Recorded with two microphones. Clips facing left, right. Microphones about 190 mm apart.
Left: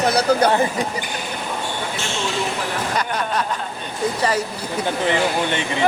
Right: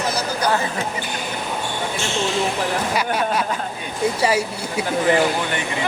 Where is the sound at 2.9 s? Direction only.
10° right (ahead or behind).